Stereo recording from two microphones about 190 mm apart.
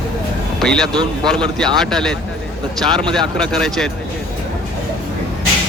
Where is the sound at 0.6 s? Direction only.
Centre (ahead or behind).